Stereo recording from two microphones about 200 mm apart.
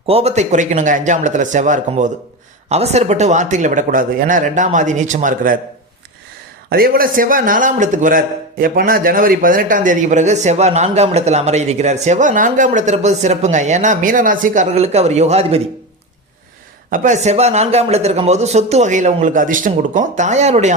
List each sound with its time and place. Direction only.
0.1 s a man's voice: 30° right (ahead or behind)
6.7 s a man's voice: 50° right (ahead or behind); by 15.6 s 30° right (ahead or behind)
16.9 s a man's voice: 40° right (ahead or behind)